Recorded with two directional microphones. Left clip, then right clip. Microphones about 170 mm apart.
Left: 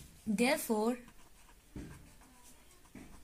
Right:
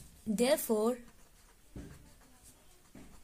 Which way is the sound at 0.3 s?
60° right (ahead or behind).